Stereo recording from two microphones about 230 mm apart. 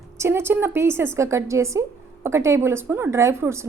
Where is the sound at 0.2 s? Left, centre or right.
Centre.